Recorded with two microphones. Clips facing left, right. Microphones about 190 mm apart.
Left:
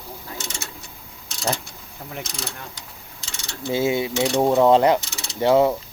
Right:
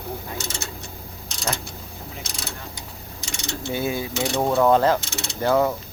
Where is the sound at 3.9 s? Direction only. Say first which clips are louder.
Left 4 dB; 20° left (ahead or behind).